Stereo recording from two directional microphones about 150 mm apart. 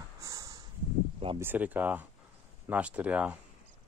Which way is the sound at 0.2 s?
20° right (ahead or behind).